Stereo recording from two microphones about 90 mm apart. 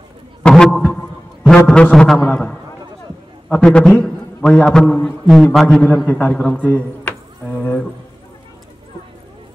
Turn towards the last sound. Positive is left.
turn(degrees=15)  # may be behind; listen again after turning